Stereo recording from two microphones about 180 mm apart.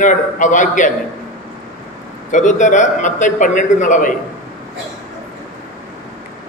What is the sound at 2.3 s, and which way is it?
A man's voice, 45° left (ahead or behind).